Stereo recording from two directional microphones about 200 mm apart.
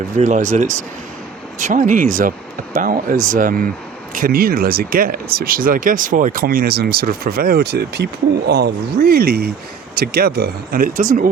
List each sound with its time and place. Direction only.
0.2 s speech: 35° right (ahead or behind)